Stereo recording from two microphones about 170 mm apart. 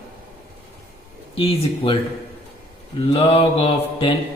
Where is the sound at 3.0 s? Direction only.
35° left (ahead or behind).